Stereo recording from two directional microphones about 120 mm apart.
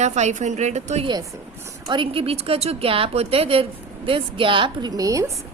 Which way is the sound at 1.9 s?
50° right (ahead or behind).